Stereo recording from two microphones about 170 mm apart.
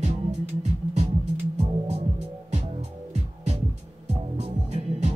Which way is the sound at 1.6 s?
35° right (ahead or behind).